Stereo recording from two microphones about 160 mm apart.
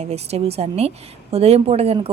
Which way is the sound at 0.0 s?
40° right (ahead or behind).